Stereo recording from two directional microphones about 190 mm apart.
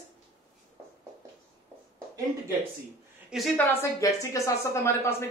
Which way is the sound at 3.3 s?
Centre (ahead or behind).